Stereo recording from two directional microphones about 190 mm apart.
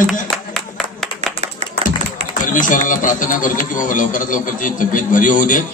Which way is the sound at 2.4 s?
45° left (ahead or behind).